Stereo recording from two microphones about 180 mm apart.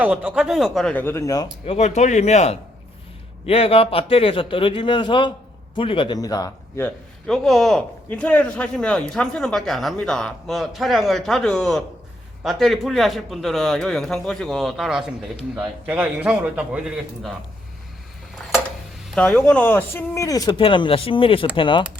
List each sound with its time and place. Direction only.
0.0 s a man's voice: 10° right (ahead or behind); by 1.5 s 20° left (ahead or behind)
1.6 s speech: 35° left (ahead or behind); by 6.9 s 15° left (ahead or behind)
7.3 s a man's voice: centre (ahead or behind)
19.1 s speech: 5° left (ahead or behind); by 21.8 s 25° left (ahead or behind)